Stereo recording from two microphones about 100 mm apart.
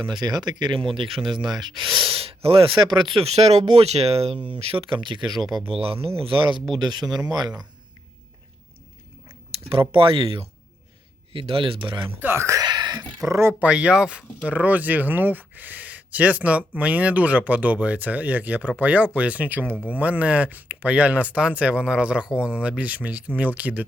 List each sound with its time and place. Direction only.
0.2 s speech: 45° right (ahead or behind)
1.7 s speech: centre (ahead or behind)
2.0 s speech: 70° right (ahead or behind); by 3.1 s 50° right (ahead or behind)
3.2 s speech: 90° right
4.4 s speech: 60° right (ahead or behind)
5.3 s speech: centre (ahead or behind)
5.6 s speech: 70° right (ahead or behind)
6.7 s speech: 45° right (ahead or behind)
9.9 s speech: 60° right (ahead or behind)
12.2 s speech: 25° right (ahead or behind)
12.6 s a sound: 45° right (ahead or behind)
13.2 s speech: 30° right (ahead or behind)
13.5 s speech: 10° right (ahead or behind)